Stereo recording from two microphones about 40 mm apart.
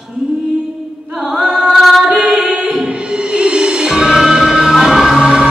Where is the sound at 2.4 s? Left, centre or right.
Right.